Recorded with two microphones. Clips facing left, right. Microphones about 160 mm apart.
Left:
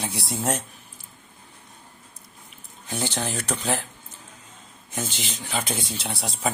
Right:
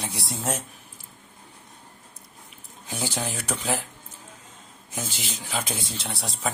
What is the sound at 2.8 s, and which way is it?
Speech, 5° right (ahead or behind).